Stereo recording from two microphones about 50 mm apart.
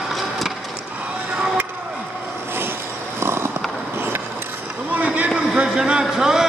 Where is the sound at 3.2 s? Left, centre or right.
Right.